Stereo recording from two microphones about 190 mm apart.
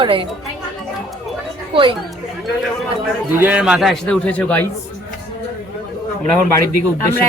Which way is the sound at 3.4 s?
5° right (ahead or behind).